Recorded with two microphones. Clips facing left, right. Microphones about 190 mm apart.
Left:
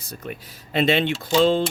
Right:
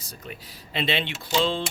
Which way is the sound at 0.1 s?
50° left (ahead or behind).